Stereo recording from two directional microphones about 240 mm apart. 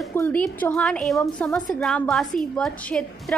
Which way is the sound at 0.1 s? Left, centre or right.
Centre.